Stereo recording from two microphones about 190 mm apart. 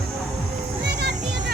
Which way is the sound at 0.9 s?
60° right (ahead or behind).